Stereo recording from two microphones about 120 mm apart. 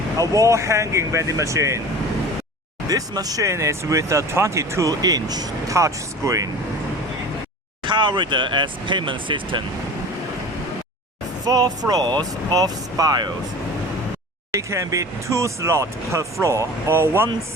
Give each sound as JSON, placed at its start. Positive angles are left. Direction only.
{"t": 0.2, "sound": "speech", "side_deg": -25}
{"t": 2.9, "sound": "speech", "side_deg": -30}
{"t": 7.9, "sound": "speech", "side_deg": -40}
{"t": 11.4, "sound": "speech", "side_deg": -35}
{"t": 14.7, "sound": "speech", "side_deg": -25}